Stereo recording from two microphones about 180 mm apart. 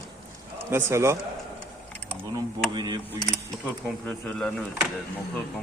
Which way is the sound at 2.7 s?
25° right (ahead or behind).